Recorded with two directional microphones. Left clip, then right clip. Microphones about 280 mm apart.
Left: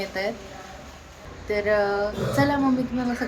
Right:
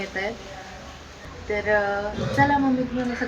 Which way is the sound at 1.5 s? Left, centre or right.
Centre.